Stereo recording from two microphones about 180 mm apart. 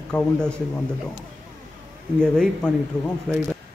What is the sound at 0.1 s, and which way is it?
Mantra, 5° left (ahead or behind).